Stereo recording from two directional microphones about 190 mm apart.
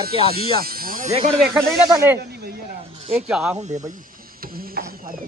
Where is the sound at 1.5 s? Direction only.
Centre (ahead or behind).